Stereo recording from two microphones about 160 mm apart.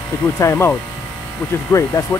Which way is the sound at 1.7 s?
20° left (ahead or behind).